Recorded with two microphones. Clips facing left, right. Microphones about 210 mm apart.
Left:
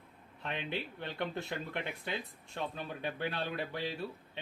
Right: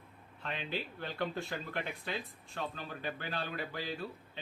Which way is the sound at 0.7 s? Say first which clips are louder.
Even; 20° left (ahead or behind).